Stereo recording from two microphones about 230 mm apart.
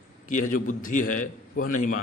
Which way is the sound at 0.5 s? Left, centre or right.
Left.